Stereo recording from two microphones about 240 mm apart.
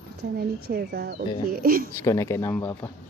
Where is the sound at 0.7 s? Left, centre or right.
Right.